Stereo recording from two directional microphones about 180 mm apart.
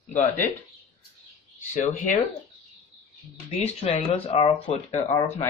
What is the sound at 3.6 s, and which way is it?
Speech, 35° left (ahead or behind).